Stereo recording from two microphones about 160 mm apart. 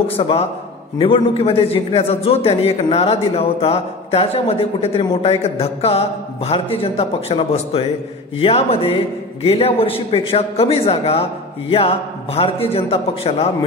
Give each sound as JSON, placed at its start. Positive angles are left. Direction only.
{"t": 0.2, "sound": "a man's voice", "side_deg": 35}